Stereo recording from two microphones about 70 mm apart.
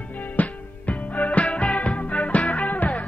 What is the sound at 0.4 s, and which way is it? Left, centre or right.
Music, left.